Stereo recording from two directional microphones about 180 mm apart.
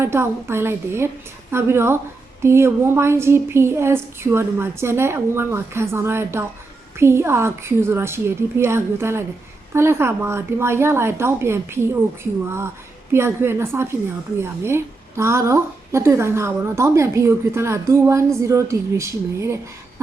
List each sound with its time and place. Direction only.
0.0 s a woman's voice: 15° right (ahead or behind)